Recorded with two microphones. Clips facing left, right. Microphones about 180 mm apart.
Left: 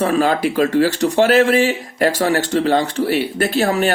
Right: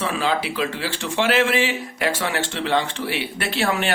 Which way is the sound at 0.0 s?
45° left (ahead or behind).